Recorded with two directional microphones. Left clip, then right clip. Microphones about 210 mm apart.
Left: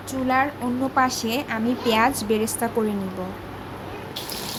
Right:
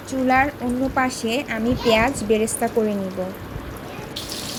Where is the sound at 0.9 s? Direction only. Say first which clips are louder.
Left 2 dB; centre (ahead or behind).